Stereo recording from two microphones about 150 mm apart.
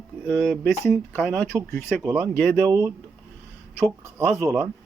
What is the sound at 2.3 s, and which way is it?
Speech, 10° left (ahead or behind).